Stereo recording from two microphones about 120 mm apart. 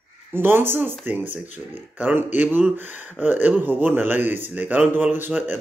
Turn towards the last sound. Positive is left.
turn(degrees=-15)  # may be behind; listen again after turning